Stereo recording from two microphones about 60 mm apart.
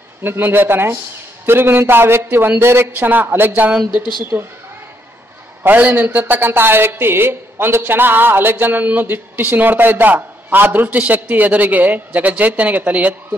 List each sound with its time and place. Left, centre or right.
0.2 s a woman's voice: right
3.0 s a woman's voice: right
5.8 s a woman's voice: right